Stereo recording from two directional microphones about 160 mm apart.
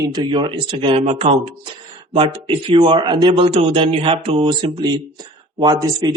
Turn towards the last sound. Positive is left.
turn(degrees=-25)  # may be behind; listen again after turning